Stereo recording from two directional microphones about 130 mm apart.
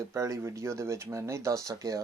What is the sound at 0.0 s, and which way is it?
Speech, 25° right (ahead or behind).